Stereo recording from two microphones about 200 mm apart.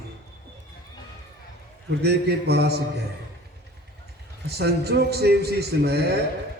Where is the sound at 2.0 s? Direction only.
55° right (ahead or behind).